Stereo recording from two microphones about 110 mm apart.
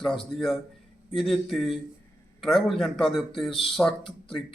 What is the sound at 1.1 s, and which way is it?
A man's voice, centre (ahead or behind).